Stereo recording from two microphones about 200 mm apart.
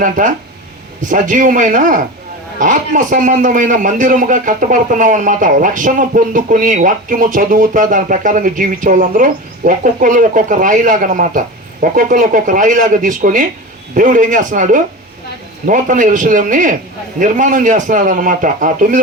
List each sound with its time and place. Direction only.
0.0 s a man's voice: 40° right (ahead or behind)